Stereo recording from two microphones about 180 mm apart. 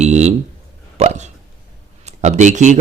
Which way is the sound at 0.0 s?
40° right (ahead or behind).